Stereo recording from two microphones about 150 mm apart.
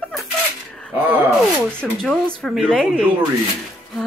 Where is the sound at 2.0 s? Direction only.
5° left (ahead or behind).